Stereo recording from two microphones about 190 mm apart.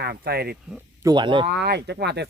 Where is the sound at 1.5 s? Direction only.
60° right (ahead or behind).